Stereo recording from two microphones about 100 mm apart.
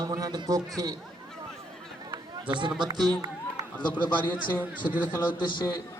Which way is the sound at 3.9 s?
15° left (ahead or behind).